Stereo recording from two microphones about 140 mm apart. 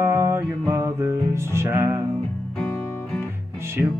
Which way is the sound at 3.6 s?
20° right (ahead or behind).